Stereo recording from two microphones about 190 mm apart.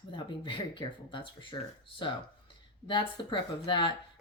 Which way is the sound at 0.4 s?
25° left (ahead or behind).